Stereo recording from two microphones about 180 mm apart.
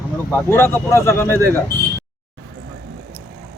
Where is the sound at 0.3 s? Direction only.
10° left (ahead or behind).